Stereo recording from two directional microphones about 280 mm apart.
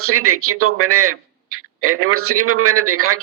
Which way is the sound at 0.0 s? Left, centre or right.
Right.